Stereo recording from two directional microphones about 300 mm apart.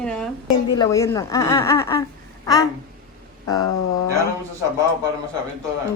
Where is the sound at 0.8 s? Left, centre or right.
Centre.